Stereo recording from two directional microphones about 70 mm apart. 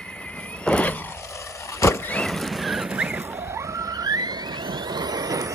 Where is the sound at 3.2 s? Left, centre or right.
Right.